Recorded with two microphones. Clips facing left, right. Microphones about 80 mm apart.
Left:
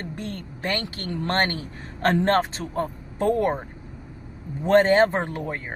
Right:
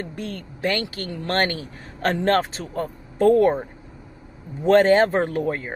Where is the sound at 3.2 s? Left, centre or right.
Centre.